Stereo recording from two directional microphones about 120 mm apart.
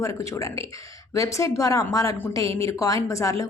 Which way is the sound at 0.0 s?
25° left (ahead or behind).